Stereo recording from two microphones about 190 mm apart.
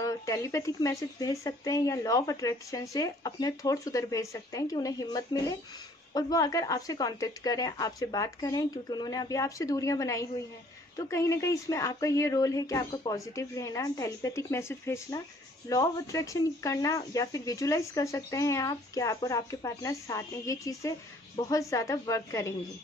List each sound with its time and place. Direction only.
0.0 s speech: 15° left (ahead or behind)